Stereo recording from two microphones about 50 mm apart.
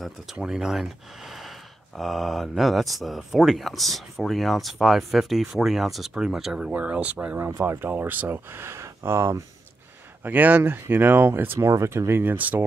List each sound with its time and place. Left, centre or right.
0.4 s speech: centre
6.7 s speech: right
7.3 s speech: right
8.0 s speech: right
10.2 s speech: right
11.5 s speech: right
12.2 s speech: right